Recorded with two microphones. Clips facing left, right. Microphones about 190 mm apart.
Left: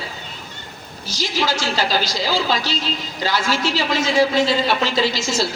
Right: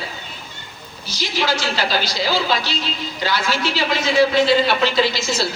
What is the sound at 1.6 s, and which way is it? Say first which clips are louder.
Speech: left 1 dB; 40° left (ahead or behind).